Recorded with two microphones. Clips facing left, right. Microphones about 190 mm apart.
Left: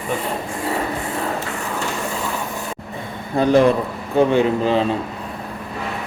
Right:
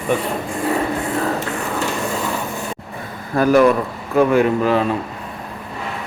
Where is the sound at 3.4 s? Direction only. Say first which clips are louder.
Right 1 dB; 25° left (ahead or behind).